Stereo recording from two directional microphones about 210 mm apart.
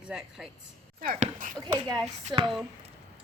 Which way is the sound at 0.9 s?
40° right (ahead or behind).